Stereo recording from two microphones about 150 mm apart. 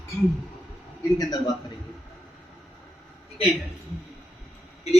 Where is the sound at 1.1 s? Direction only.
25° left (ahead or behind).